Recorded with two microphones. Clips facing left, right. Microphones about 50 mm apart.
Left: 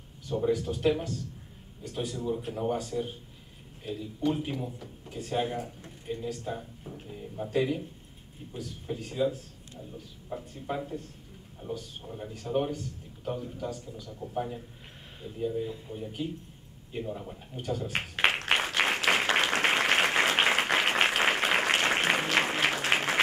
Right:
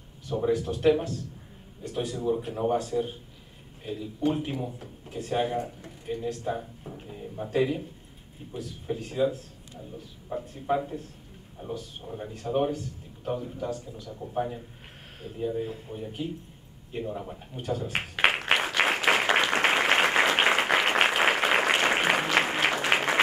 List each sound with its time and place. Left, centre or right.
0.4 s speech: centre
2.5 s speech: centre
7.0 s a sound: centre
7.5 s speech: centre
12.1 s speech: centre
17.6 s applause: centre